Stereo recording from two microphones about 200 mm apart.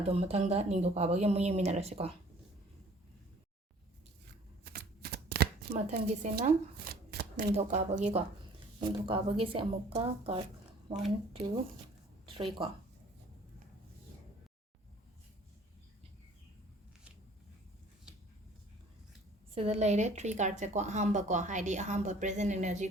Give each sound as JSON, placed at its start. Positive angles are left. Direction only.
{"t": 0.0, "sound": "speech", "side_deg": -30}
{"t": 4.6, "sound": "shuffling cards", "side_deg": -50}
{"t": 5.7, "sound": "speech", "side_deg": -35}
{"t": 6.3, "sound": "shuffling cards", "side_deg": -50}
{"t": 7.5, "sound": "speech", "side_deg": -35}
{"t": 8.8, "sound": "a woman's voice", "side_deg": -25}
{"t": 12.2, "sound": "speech", "side_deg": -25}
{"t": 19.5, "sound": "speech", "side_deg": -30}